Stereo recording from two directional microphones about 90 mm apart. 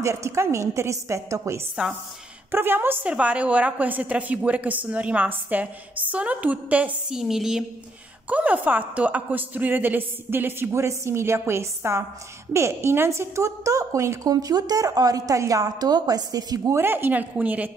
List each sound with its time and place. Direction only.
0.0 s a woman's voice: 35° right (ahead or behind)
2.5 s a woman's voice: 25° right (ahead or behind); by 7.6 s 5° right (ahead or behind)
8.3 s a woman's voice: 15° right (ahead or behind); by 14.3 s 35° right (ahead or behind)
14.3 s a woman's voice: 45° right (ahead or behind)
16.7 s a woman's voice: 25° right (ahead or behind)